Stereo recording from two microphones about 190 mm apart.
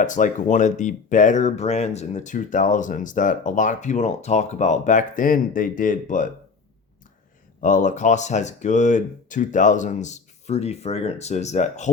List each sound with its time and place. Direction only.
0.0 s speech: 40° left (ahead or behind)
7.6 s speech: 40° left (ahead or behind)